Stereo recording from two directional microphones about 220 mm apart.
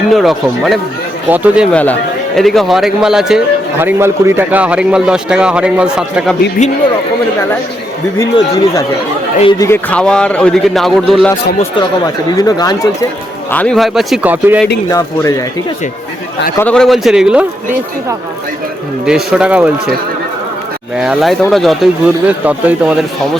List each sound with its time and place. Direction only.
0.1 s a man's voice: centre (ahead or behind)
1.7 s a man's voice: 5° left (ahead or behind)
8.2 s a man's voice: 15° left (ahead or behind)
12.4 s speech: 15° left (ahead or behind)
13.5 s a man's voice: 5° left (ahead or behind)
14.8 s speech: 15° left (ahead or behind)
16.6 s a man's voice: 5° left (ahead or behind)
19.0 s a man's voice: 5° right (ahead or behind)
21.0 s a man's voice: centre (ahead or behind)